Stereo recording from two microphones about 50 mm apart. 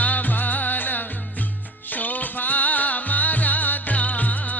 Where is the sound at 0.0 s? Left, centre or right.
Left.